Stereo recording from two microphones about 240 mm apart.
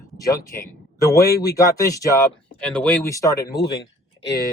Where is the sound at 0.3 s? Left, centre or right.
Centre.